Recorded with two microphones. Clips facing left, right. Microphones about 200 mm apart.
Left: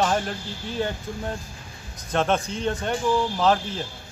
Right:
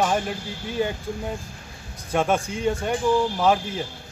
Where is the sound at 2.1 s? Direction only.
10° right (ahead or behind).